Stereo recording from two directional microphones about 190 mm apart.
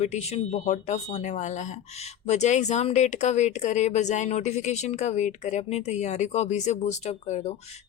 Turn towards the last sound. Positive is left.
turn(degrees=35)  # may be behind; listen again after turning